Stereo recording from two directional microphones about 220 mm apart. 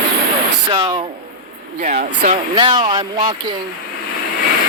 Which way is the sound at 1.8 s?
35° right (ahead or behind).